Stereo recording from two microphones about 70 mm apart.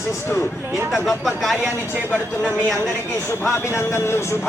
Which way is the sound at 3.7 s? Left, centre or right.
Left.